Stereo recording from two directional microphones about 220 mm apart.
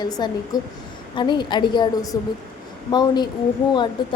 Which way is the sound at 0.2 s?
20° left (ahead or behind).